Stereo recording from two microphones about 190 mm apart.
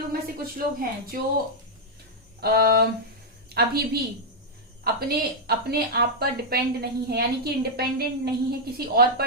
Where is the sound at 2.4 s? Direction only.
55° right (ahead or behind).